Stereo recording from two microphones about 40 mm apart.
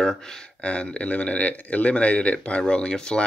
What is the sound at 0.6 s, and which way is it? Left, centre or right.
Speech, left.